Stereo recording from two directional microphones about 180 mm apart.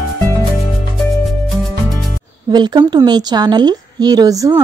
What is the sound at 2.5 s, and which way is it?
A woman's voice, 25° right (ahead or behind).